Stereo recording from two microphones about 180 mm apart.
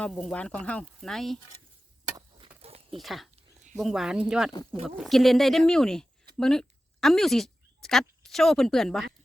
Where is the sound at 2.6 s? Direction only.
35° right (ahead or behind).